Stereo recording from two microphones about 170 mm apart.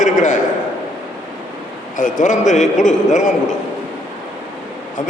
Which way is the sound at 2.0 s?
45° left (ahead or behind).